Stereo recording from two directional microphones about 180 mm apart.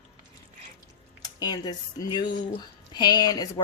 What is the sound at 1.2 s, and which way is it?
Speech, 20° left (ahead or behind).